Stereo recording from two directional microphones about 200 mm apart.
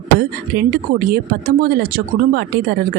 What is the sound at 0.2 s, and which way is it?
A woman's voice, 55° right (ahead or behind).